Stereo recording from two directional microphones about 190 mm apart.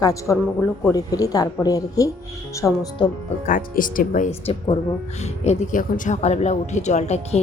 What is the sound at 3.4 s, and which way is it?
Speech, 45° left (ahead or behind).